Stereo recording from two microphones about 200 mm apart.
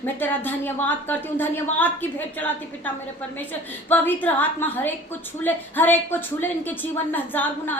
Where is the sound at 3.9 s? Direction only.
10° left (ahead or behind).